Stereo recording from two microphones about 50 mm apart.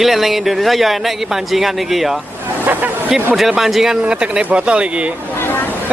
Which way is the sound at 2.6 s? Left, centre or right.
Right.